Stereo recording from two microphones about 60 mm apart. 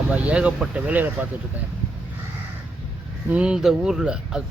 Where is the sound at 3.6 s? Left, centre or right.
Centre.